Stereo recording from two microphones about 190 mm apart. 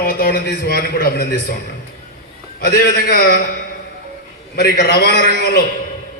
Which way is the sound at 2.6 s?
55° left (ahead or behind).